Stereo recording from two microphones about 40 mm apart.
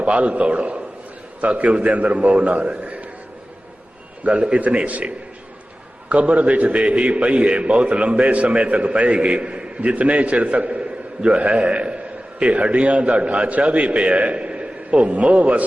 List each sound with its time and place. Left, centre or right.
0.0 s a man's voice: right
4.2 s a man's voice: right